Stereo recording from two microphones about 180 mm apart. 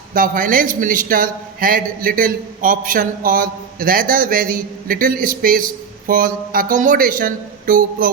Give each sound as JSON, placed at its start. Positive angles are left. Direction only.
{"t": 0.1, "sound": "a man's voice", "side_deg": -50}